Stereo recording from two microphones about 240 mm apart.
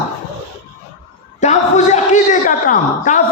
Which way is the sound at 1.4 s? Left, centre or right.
Left.